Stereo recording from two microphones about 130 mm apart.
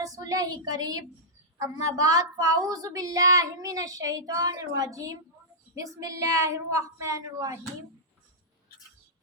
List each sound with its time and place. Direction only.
0.0 s a woman's voice: 25° right (ahead or behind)